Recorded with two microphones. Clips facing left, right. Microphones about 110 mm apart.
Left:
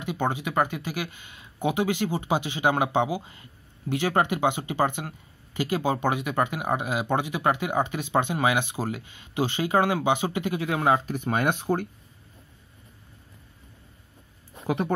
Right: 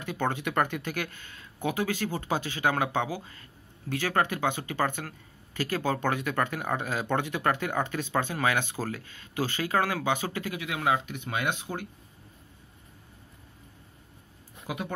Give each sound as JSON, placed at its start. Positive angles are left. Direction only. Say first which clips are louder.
{"t": 0.0, "sound": "speech", "louder": "left 2 dB", "side_deg": 15}